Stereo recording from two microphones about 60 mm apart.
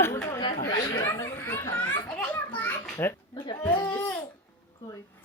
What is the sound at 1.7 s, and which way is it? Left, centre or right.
Children playing, left.